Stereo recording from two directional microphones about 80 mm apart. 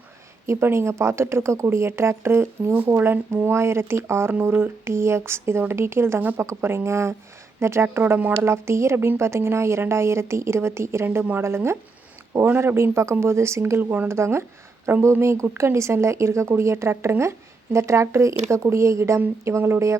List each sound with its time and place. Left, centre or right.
0.4 s speech: right